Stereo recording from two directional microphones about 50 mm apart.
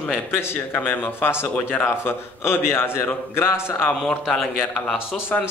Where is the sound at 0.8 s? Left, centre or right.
Left.